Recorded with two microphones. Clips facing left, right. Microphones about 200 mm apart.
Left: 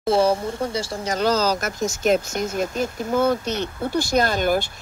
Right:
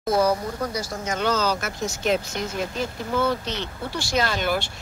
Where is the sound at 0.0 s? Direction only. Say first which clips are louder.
Left 2 dB; 30° left (ahead or behind).